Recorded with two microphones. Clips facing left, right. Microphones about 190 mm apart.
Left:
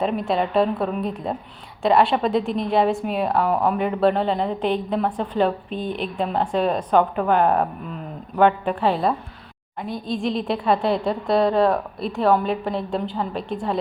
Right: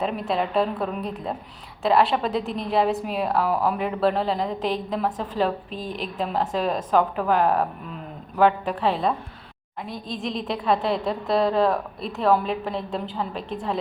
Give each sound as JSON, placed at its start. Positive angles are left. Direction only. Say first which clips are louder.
{"t": 0.0, "sound": "a woman's voice", "louder": "left 3 dB", "side_deg": 0}
{"t": 5.7, "sound": "speech", "louder": "left 5 dB", "side_deg": -40}
{"t": 6.1, "sound": "a woman's voice", "louder": "left 2 dB", "side_deg": -5}